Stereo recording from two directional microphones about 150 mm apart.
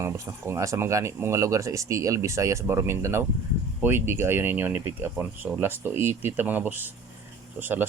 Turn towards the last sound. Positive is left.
turn(degrees=-10)  # may be behind; listen again after turning